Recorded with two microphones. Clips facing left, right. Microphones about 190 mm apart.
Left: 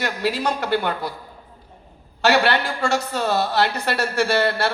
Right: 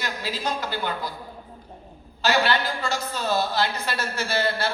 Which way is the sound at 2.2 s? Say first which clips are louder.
Left 4 dB; 65° left (ahead or behind).